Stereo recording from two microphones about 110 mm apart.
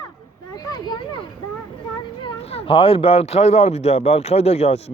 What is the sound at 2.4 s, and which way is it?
Speech, 65° left (ahead or behind).